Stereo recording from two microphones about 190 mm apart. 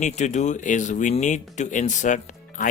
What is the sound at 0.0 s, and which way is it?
Speech, 40° left (ahead or behind).